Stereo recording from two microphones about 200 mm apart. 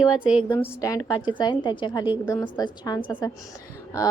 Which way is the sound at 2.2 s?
10° left (ahead or behind).